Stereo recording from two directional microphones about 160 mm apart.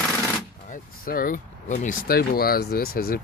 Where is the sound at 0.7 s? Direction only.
60° left (ahead or behind).